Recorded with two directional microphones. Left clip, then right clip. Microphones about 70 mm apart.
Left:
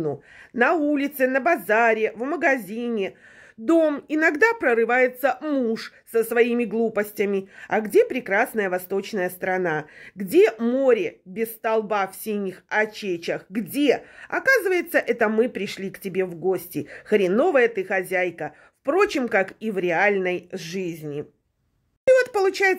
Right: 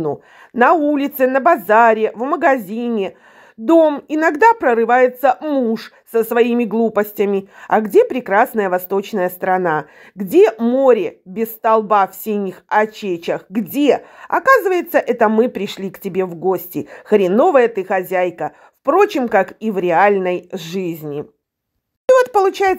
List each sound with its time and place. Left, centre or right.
0.1 s speech: right
5.4 s speech: centre
5.7 s a woman's voice: right
20.5 s speech: right
22.1 s speech: right